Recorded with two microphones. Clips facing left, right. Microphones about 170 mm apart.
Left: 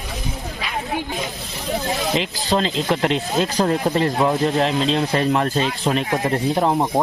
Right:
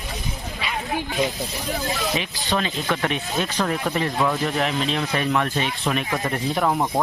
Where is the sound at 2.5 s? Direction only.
25° left (ahead or behind).